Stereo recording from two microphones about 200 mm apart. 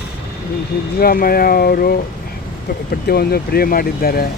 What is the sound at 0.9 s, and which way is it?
Speech, 45° left (ahead or behind).